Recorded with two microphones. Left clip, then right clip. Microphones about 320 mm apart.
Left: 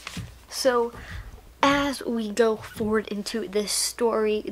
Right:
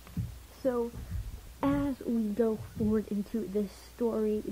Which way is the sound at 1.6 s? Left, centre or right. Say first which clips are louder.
Left 10 dB; centre.